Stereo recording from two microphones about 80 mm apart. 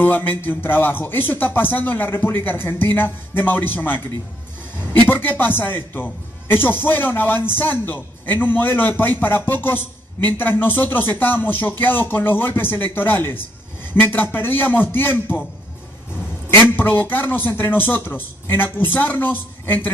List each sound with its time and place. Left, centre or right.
0.0 s speech: left
16.7 s speech: left